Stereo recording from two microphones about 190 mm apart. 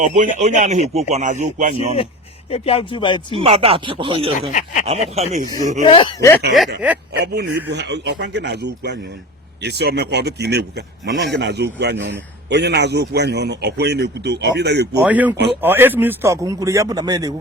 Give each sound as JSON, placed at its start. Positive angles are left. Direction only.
{"t": 0.0, "sound": "speech", "side_deg": -40}
{"t": 2.5, "sound": "speech", "side_deg": 30}
{"t": 3.3, "sound": "speech", "side_deg": -30}
{"t": 4.5, "sound": "snicker", "side_deg": 40}
{"t": 4.9, "sound": "speech", "side_deg": -35}
{"t": 5.8, "sound": "speech", "side_deg": 25}
{"t": 7.2, "sound": "a man's voice", "side_deg": -60}
{"t": 15.0, "sound": "a man's voice", "side_deg": -10}